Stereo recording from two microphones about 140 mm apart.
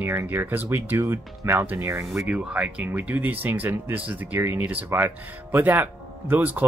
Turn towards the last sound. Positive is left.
turn(degrees=-15)  # may be behind; listen again after turning